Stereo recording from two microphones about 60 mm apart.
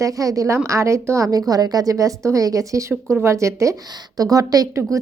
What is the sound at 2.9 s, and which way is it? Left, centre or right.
A woman's voice, right.